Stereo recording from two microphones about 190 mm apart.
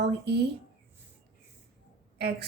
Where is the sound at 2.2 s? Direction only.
60° right (ahead or behind).